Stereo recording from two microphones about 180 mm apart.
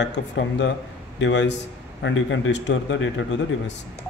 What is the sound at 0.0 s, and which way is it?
Speech, 75° left (ahead or behind).